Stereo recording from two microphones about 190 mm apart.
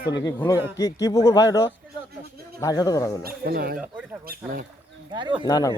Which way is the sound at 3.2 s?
50° right (ahead or behind).